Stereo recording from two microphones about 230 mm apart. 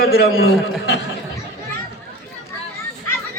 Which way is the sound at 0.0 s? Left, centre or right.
Left.